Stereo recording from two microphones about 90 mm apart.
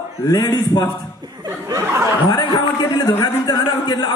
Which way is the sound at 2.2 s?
55° left (ahead or behind).